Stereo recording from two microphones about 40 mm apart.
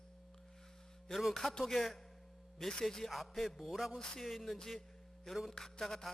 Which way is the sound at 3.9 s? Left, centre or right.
Centre.